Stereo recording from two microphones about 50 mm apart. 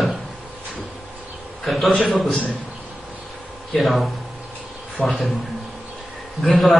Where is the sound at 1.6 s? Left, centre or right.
Centre.